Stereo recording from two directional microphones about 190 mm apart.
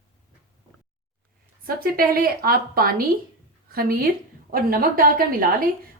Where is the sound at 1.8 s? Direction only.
50° right (ahead or behind).